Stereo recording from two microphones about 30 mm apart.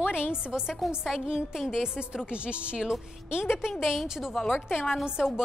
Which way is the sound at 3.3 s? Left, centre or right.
Right.